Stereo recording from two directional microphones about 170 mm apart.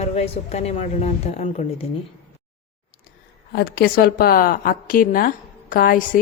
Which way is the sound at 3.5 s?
65° left (ahead or behind).